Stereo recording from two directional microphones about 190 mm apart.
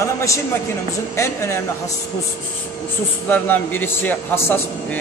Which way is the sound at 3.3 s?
10° left (ahead or behind).